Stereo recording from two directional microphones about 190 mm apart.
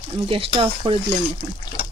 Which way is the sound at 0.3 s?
30° right (ahead or behind).